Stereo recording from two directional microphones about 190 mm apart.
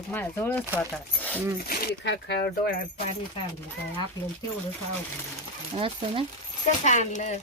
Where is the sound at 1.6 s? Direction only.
60° left (ahead or behind).